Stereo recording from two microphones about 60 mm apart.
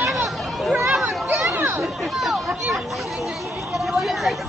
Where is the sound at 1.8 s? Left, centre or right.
Centre.